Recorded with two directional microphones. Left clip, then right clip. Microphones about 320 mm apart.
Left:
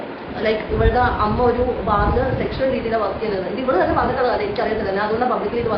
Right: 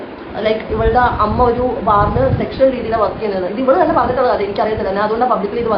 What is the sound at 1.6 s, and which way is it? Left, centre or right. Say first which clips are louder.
Speech: right 5 dB; centre.